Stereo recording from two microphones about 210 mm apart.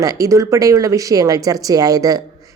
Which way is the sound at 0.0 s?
15° right (ahead or behind).